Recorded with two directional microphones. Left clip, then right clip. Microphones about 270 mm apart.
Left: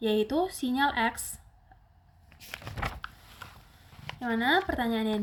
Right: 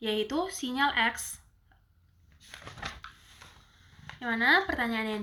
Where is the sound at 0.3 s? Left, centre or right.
Left.